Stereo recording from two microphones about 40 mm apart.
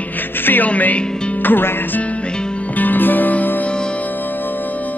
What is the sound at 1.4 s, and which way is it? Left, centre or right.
Speech, left.